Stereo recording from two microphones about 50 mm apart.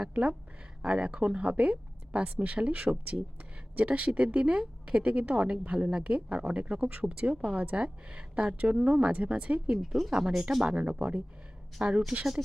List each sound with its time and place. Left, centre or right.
0.0 s speech: right
10.1 s speech: centre
10.8 s speech: right